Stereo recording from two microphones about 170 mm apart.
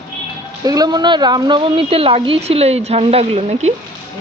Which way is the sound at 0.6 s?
20° right (ahead or behind).